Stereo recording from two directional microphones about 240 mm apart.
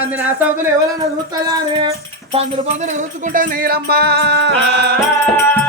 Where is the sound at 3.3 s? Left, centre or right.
Right.